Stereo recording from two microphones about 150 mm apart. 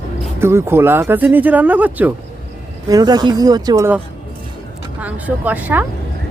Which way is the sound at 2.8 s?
25° right (ahead or behind).